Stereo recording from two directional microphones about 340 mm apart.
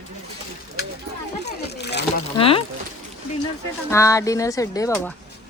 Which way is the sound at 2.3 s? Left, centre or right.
Centre.